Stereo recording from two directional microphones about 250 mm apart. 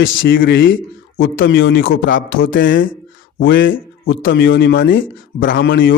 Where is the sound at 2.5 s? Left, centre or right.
Left.